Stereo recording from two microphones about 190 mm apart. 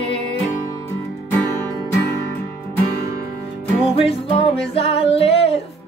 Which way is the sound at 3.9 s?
30° left (ahead or behind).